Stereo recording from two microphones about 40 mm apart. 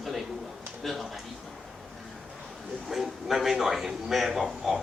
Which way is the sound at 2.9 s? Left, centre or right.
Centre.